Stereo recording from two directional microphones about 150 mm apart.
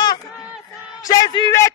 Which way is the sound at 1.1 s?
25° left (ahead or behind).